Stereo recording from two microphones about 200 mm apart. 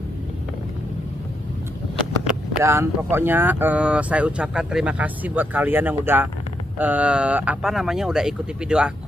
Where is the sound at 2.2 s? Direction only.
15° right (ahead or behind).